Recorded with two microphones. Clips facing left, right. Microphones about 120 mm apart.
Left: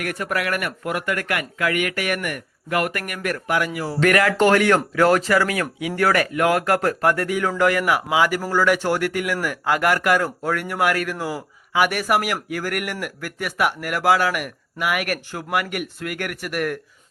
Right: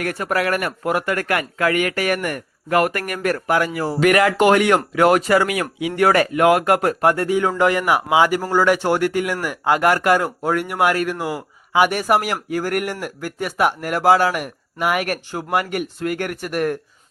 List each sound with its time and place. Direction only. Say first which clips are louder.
0.0 s speech: right 4 dB; 30° right (ahead or behind)
4.0 s speech: right 2 dB; 20° right (ahead or behind)